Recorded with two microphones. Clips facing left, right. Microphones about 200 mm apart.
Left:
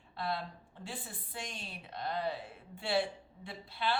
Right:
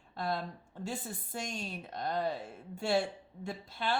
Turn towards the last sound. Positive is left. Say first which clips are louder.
# right 1 dB
turn(degrees=-45)  # may be behind; listen again after turning